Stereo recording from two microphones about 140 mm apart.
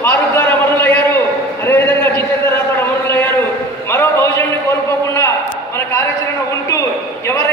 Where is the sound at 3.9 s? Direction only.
15° left (ahead or behind).